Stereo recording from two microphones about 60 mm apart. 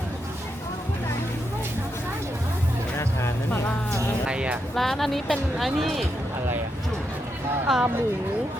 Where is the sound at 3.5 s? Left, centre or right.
Left.